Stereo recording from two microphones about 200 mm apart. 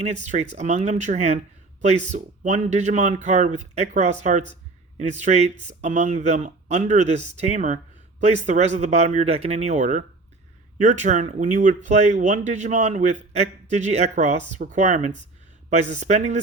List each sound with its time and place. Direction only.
0.0 s speech: 35° right (ahead or behind)